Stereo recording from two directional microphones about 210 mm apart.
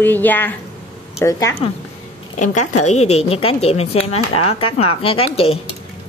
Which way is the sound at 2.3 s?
35° left (ahead or behind).